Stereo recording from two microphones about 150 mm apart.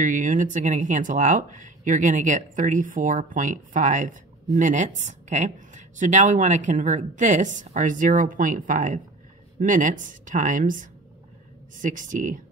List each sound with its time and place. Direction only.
0.0 s speech: 60° right (ahead or behind)